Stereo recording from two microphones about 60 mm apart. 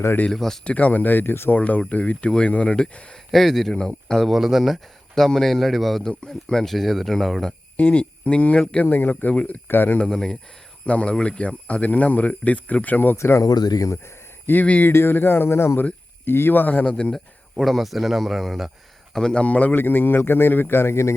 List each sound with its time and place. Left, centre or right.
0.3 s speech: centre
0.6 s speech: left
3.3 s speech: centre
4.4 s speech: centre
7.8 s speech: left
9.3 s speech: centre
9.6 s a man's voice: left
10.1 s speech: centre; by 13.1 s left
13.1 s speech: left
13.4 s speech: left
14.4 s a man's voice: left
16.9 s speech: centre
17.6 s speech: centre
19.1 s a man's voice: centre; by 21.2 s left